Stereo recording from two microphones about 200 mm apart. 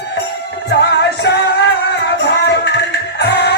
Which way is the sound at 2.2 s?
60° left (ahead or behind).